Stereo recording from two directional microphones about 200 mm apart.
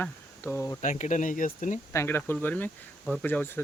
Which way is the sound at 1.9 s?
10° left (ahead or behind).